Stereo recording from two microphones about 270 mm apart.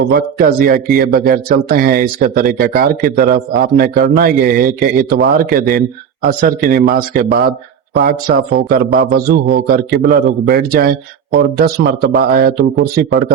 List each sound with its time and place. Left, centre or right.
0.1 s speech: right